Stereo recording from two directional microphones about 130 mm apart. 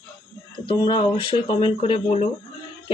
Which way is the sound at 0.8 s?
40° left (ahead or behind).